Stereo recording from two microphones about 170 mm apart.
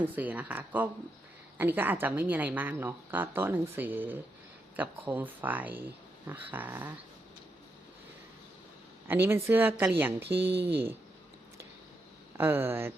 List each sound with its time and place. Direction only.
0.0 s a woman's voice: 10° right (ahead or behind)
9.0 s a woman's voice: 10° right (ahead or behind)
10.5 s speech: 75° right (ahead or behind)
12.4 s a woman's voice: 15° right (ahead or behind)